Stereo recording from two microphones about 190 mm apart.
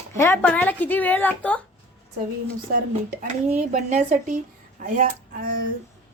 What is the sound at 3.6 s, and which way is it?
A woman's voice, 40° right (ahead or behind).